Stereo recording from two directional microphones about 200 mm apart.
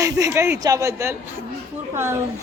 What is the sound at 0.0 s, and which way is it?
Speech, 15° right (ahead or behind).